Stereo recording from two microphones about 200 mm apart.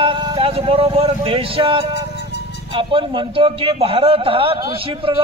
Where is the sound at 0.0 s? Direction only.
25° right (ahead or behind).